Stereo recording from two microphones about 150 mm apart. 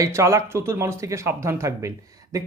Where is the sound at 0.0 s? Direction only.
20° right (ahead or behind).